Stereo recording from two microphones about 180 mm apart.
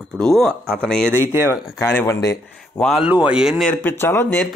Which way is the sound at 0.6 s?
10° right (ahead or behind).